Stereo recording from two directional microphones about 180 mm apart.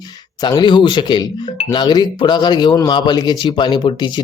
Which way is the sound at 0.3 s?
25° left (ahead or behind).